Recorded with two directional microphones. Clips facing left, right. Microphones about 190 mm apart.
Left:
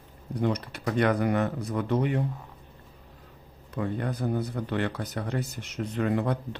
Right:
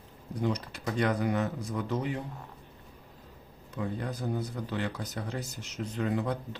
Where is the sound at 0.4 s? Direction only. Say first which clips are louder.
Left 3 dB; 60° left (ahead or behind).